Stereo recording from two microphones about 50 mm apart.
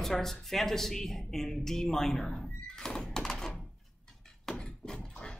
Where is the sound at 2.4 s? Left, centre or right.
Centre.